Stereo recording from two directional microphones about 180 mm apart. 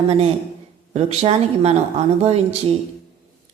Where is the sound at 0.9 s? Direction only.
35° right (ahead or behind).